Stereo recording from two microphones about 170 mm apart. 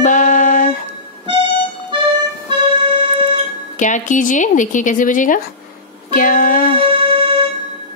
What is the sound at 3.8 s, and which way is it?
Speech, 50° left (ahead or behind).